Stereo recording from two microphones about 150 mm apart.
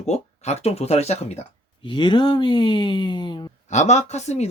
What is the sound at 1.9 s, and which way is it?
Speech, 30° left (ahead or behind).